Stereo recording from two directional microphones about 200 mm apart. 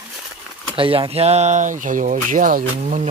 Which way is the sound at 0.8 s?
25° right (ahead or behind).